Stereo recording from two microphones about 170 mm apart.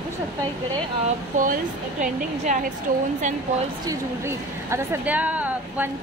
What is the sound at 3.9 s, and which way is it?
Speech, 15° right (ahead or behind).